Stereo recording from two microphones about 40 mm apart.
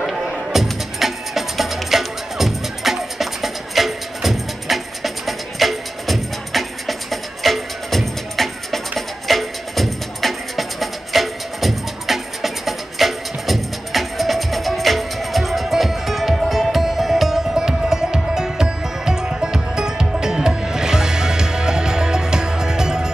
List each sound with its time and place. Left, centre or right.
0.0 s music: centre
17.6 s music: centre